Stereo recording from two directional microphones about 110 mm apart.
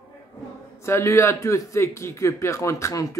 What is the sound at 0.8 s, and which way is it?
A man's voice, 25° left (ahead or behind).